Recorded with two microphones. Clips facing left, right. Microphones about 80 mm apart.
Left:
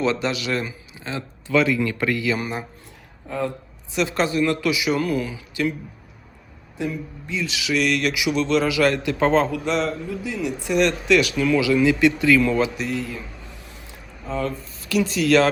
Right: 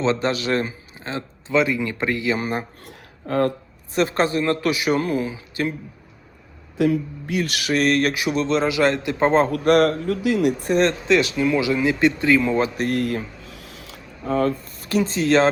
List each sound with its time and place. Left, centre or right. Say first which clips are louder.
0.0 s a man's voice: right 2 dB; right
2.8 s a sound: right 6 dB; right
3.9 s speech: right 2 dB; right
5.0 s a man's voice: right 1 dB; right
6.7 s speech: right 8 dB; right
9.5 s a man's voice: right 7 dB; right
10.6 s a man's voice: right 1 dB; right
12.6 s speech: right 3 dB; right
13.0 s a sound: right 7 dB; right
14.3 s speech: right 5 dB; right